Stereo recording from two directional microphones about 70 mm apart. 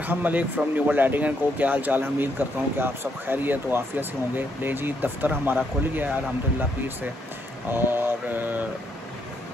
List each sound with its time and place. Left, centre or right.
0.0 s speech: right
7.7 s speech: right